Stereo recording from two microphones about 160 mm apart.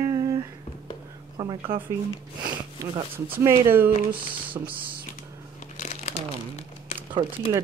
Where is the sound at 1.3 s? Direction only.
30° right (ahead or behind).